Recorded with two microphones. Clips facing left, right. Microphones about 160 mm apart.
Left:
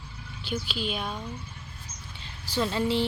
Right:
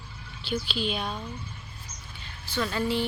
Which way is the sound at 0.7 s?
5° left (ahead or behind).